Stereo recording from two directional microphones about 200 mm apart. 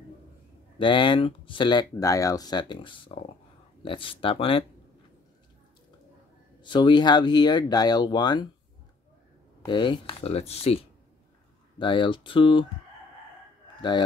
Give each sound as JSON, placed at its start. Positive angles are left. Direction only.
{"t": 0.7, "sound": "speech", "side_deg": 25}
{"t": 6.6, "sound": "speech", "side_deg": 25}
{"t": 9.7, "sound": "speech", "side_deg": 25}
{"t": 13.7, "sound": "speech", "side_deg": 25}